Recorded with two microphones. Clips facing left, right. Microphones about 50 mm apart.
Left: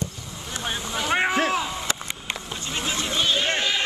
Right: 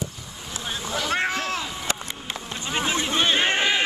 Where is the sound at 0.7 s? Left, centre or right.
Centre.